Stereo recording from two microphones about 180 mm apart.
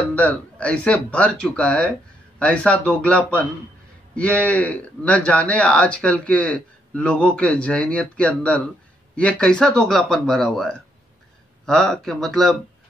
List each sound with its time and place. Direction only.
0.1 s a man's voice: 10° left (ahead or behind)